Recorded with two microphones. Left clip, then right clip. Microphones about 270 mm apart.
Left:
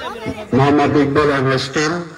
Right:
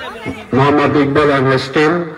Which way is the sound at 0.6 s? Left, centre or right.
Centre.